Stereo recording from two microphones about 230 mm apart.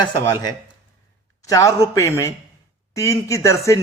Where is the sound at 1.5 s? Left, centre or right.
Centre.